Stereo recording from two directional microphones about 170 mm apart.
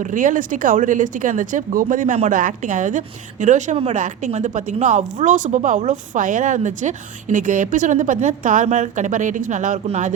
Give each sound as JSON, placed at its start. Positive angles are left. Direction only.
{"t": 0.0, "sound": "a woman's voice", "side_deg": -50}